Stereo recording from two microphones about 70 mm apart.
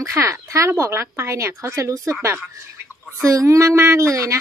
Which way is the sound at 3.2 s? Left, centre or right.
Right.